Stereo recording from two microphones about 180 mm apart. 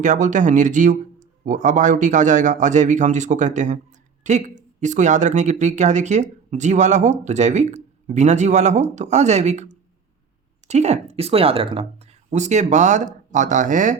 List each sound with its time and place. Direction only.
0.0 s a man's voice: 45° right (ahead or behind)